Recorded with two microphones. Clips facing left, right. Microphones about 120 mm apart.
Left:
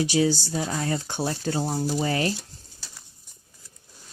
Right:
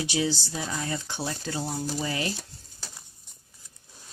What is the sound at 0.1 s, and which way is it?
Speech, 40° left (ahead or behind).